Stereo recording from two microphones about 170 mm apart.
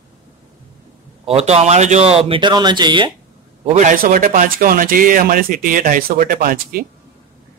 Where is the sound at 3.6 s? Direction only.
45° right (ahead or behind).